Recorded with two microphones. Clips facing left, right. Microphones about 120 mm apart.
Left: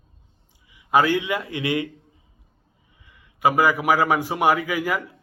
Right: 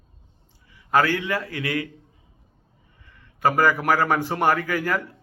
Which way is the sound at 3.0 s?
10° left (ahead or behind).